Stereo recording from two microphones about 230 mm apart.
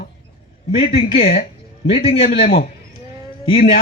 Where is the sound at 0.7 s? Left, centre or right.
Left.